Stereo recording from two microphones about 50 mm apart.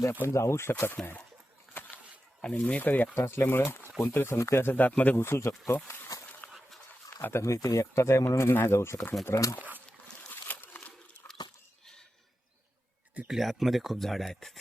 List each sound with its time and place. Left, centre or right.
0.3 s speech: left
0.7 s speech: left
1.7 s a sound: left
2.4 s speech: left
3.2 s speech: left
4.4 s speech: left
4.7 s speech: left
5.1 s speech: left
6.4 s a sound: left
7.3 s speech: left
8.5 s speech: left
10.2 s a sound: left
10.5 s crumpling: left
13.3 s speech: centre